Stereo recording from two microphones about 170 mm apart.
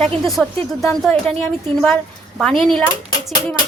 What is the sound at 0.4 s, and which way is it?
A woman's voice, centre (ahead or behind).